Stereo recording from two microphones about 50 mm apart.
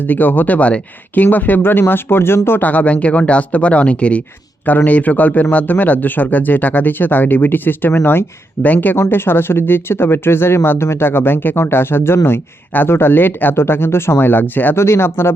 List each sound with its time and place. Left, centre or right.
0.0 s speech: left
2.6 s speech: left
8.6 s speech: left
9.0 s speech: left
14.8 s speech: left